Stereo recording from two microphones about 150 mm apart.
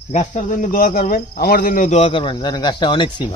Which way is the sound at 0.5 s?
60° left (ahead or behind).